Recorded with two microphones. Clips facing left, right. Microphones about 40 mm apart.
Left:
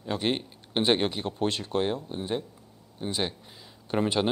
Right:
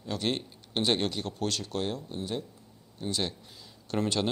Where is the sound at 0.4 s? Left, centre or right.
Left.